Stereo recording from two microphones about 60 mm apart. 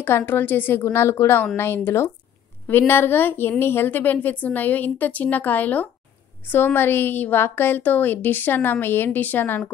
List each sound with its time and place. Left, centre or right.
0.0 s a woman's voice: left